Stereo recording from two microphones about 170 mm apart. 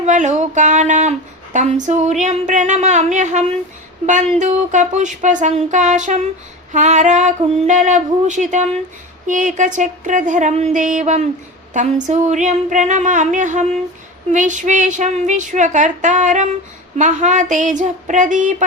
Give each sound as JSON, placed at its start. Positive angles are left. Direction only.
{"t": 0.0, "sound": "speech", "side_deg": -45}